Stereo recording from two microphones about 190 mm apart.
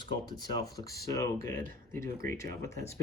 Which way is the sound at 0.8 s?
15° left (ahead or behind).